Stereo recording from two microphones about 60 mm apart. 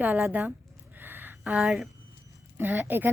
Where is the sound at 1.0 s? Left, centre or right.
Right.